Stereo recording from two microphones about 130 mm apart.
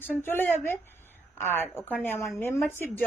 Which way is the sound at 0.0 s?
15° left (ahead or behind).